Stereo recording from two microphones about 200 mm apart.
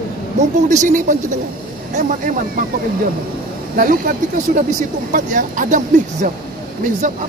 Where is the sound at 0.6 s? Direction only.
40° right (ahead or behind).